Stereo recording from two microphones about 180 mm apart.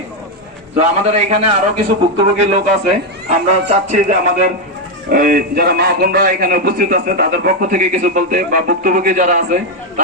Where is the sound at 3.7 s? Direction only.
40° right (ahead or behind).